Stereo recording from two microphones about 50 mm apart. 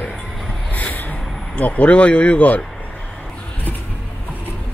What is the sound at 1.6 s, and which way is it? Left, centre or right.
Speech, left.